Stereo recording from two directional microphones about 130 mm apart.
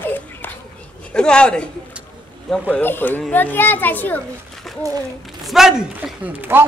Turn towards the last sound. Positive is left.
turn(degrees=-15)  # may be behind; listen again after turning